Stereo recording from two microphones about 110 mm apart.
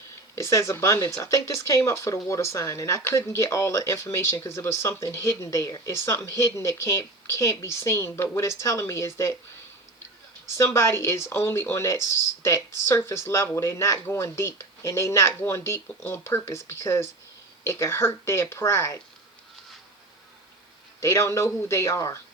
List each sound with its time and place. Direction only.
0.3 s speech: 30° left (ahead or behind)
10.6 s speech: 25° left (ahead or behind)
21.0 s speech: 25° left (ahead or behind)